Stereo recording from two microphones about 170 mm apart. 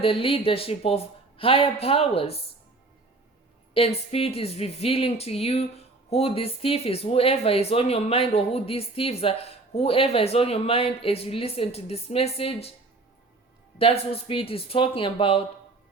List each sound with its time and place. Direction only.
0.0 s speech: 35° left (ahead or behind)
3.8 s speech: 35° left (ahead or behind)
13.7 s speech: 35° left (ahead or behind)